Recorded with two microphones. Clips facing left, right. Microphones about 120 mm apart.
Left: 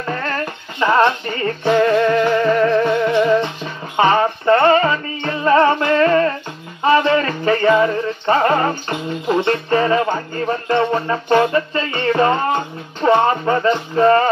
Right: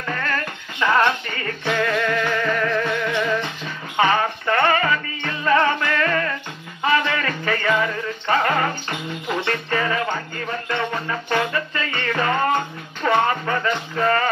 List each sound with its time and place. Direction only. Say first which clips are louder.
0.0 s music: left 3 dB; 30° left (ahead or behind)